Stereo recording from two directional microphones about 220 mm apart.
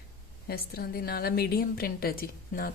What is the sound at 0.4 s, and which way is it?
A woman's voice, 45° left (ahead or behind).